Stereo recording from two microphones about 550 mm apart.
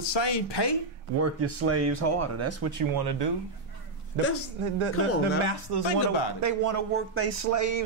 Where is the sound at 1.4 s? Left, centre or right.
Right.